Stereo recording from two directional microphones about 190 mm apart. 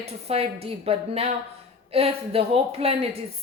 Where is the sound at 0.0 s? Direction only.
30° right (ahead or behind).